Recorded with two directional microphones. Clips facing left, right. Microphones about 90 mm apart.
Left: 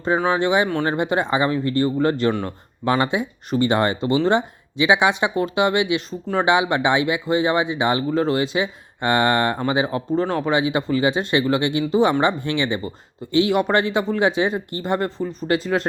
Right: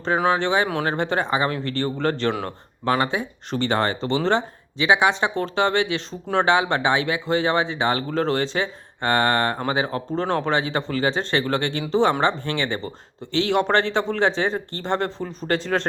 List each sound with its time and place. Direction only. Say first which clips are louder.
0.3 s speech: left 1 dB; 15° left (ahead or behind)